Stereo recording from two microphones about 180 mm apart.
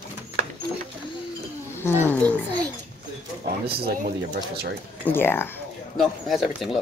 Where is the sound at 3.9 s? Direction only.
60° right (ahead or behind).